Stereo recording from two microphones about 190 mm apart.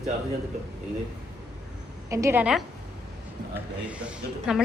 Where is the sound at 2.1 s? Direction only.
15° right (ahead or behind).